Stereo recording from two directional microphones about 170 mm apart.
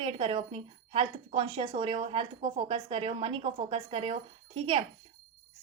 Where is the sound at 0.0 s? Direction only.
30° right (ahead or behind).